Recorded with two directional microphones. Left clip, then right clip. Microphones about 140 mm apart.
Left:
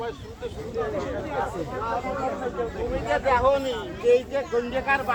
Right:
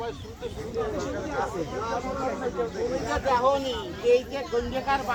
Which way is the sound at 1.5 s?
75° right (ahead or behind).